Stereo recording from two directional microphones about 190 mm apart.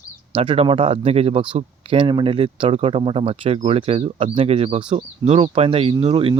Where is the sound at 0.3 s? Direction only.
30° right (ahead or behind).